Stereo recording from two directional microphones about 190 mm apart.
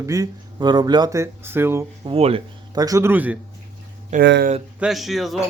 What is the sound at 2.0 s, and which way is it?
Speech, 30° right (ahead or behind).